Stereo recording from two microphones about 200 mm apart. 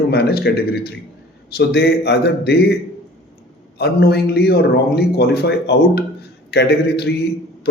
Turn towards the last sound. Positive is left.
turn(degrees=55)  # may be behind; listen again after turning